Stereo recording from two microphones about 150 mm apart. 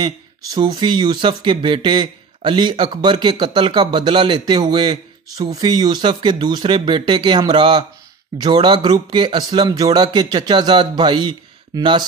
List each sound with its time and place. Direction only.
0.0 s a man's voice: 30° right (ahead or behind)